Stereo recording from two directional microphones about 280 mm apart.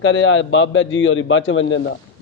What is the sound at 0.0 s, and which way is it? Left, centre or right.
A man's voice, left.